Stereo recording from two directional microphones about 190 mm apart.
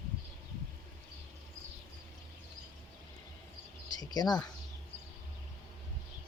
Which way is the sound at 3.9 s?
20° left (ahead or behind).